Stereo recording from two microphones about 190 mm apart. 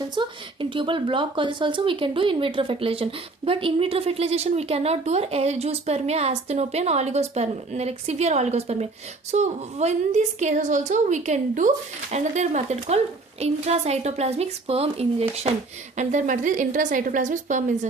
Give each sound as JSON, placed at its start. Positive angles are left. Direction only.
{"t": 0.1, "sound": "a woman's voice", "side_deg": -25}